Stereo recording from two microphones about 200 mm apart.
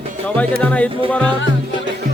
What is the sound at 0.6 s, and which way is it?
Speech, 5° left (ahead or behind).